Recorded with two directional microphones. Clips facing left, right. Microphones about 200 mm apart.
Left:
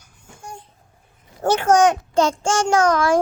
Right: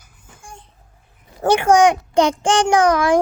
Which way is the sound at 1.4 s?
10° right (ahead or behind).